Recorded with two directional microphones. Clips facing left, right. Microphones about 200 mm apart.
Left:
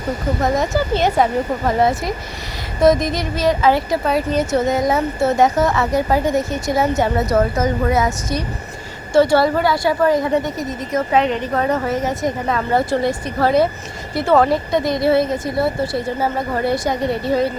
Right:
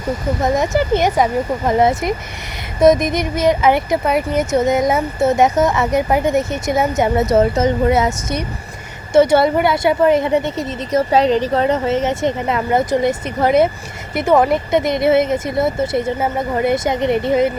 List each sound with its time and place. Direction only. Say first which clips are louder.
0.6 s speech: right 2 dB; 15° right (ahead or behind)